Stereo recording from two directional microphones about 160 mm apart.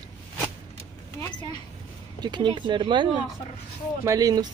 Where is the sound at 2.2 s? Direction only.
30° right (ahead or behind).